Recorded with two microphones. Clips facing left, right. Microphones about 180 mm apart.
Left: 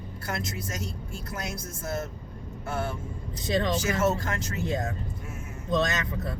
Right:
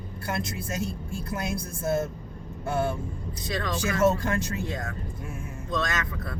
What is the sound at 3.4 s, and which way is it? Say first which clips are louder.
Speech: left 3 dB; 25° left (ahead or behind).